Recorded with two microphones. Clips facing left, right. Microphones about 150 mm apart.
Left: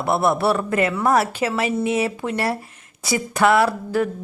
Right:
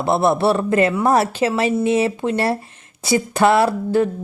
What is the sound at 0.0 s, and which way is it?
Speech, 25° right (ahead or behind).